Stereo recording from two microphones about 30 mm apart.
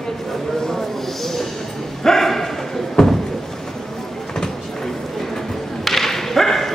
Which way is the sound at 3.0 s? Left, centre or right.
Centre.